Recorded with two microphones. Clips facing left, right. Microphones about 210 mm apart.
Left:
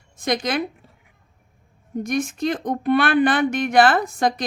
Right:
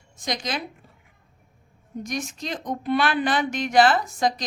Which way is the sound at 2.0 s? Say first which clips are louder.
Left 8 dB; 55° left (ahead or behind).